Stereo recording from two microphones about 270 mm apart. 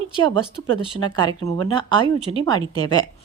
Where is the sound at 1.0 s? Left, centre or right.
Centre.